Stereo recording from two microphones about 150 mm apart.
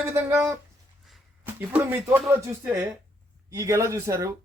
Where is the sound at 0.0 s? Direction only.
20° right (ahead or behind).